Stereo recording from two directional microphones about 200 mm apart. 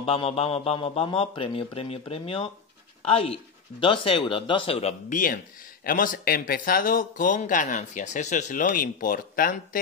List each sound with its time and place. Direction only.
0.0 s a man's voice: 30° left (ahead or behind)
5.1 s speech: 45° left (ahead or behind)